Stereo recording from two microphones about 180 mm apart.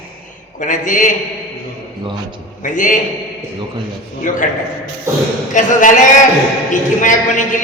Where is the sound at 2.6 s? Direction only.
45° left (ahead or behind).